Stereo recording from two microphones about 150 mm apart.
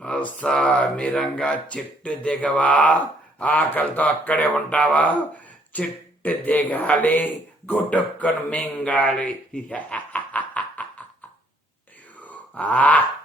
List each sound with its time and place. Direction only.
0.4 s a man's voice: 5° left (ahead or behind)
12.2 s groan: 10° left (ahead or behind)